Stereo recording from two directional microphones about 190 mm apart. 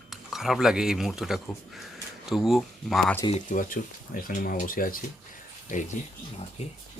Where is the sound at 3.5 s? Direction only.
45° left (ahead or behind).